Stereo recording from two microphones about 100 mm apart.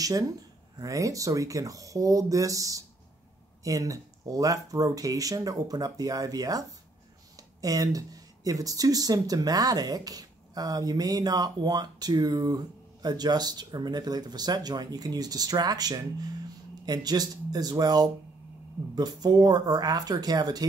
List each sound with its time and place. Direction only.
0.7 s speech: 35° right (ahead or behind)